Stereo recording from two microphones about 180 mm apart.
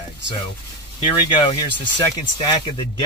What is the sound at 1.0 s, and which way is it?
Speech, 25° left (ahead or behind).